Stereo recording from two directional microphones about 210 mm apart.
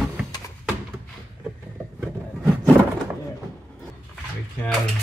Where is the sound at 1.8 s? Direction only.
10° right (ahead or behind).